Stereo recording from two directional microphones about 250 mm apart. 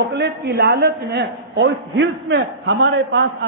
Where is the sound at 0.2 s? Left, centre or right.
Right.